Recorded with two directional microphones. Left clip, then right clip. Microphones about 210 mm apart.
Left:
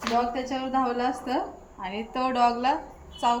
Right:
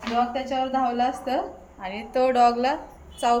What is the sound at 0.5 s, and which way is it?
Speech, 20° right (ahead or behind).